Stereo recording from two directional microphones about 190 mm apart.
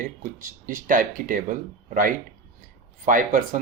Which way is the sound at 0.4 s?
45° right (ahead or behind).